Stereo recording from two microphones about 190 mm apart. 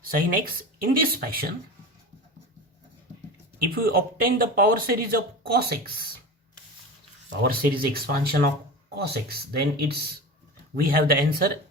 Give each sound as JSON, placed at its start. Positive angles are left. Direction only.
{"t": 0.1, "sound": "speech", "side_deg": -50}
{"t": 3.7, "sound": "speech", "side_deg": -50}
{"t": 7.4, "sound": "speech", "side_deg": -50}